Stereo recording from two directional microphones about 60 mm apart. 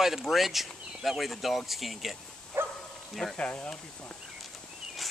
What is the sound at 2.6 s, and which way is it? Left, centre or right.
Bow-wow, right.